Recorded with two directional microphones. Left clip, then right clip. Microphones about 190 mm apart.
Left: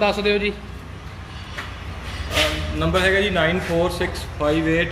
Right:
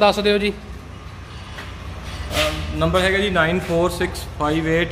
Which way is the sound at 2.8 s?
55° right (ahead or behind).